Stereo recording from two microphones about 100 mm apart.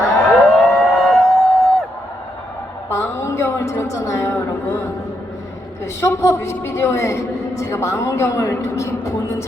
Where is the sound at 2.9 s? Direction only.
25° left (ahead or behind).